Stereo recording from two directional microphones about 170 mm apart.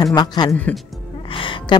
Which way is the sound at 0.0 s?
25° left (ahead or behind).